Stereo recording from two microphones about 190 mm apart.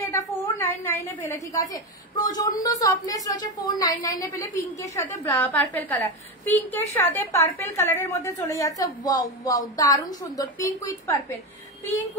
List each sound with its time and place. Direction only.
0.1 s a woman's voice: 15° left (ahead or behind)